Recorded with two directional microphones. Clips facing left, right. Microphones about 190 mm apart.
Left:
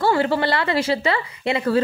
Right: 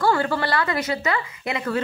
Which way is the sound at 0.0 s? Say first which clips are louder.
Left 2 dB; 25° left (ahead or behind).